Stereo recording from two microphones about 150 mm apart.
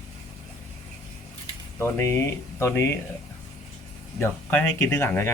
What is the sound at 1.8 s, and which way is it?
Speech, 15° left (ahead or behind).